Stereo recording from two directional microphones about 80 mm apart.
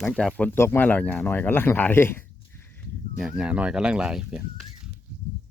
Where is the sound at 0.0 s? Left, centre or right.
Centre.